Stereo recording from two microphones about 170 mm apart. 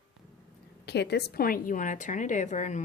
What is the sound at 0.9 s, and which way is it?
Speech, 80° left.